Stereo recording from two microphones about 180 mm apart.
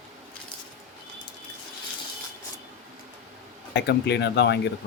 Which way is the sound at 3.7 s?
70° left (ahead or behind).